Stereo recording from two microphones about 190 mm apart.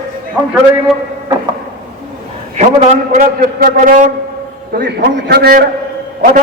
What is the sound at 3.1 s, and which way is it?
A man's voice, 45° right (ahead or behind).